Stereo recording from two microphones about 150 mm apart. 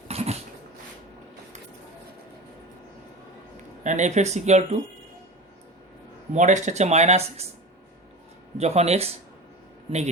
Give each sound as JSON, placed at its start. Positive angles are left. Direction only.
{"t": 0.1, "sound": "dog", "side_deg": -45}
{"t": 3.8, "sound": "speech", "side_deg": -50}
{"t": 6.3, "sound": "speech", "side_deg": -55}
{"t": 8.5, "sound": "speech", "side_deg": -45}